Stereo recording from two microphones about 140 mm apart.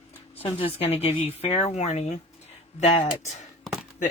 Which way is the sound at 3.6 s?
Centre (ahead or behind).